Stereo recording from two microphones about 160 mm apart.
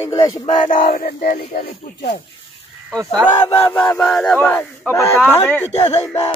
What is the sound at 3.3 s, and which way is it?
Speech, 20° left (ahead or behind).